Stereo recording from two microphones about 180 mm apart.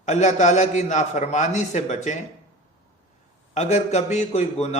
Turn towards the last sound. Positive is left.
turn(degrees=40)  # may be behind; listen again after turning